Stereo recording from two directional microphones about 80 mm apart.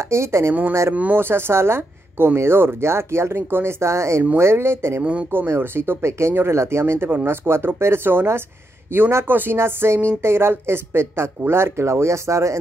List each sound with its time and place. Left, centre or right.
0.0 s speech: right
0.9 s speech: right